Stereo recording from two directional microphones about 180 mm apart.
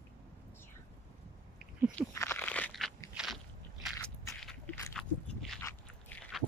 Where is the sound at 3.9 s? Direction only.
15° left (ahead or behind).